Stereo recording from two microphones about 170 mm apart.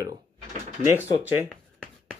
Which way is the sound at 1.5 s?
5° left (ahead or behind).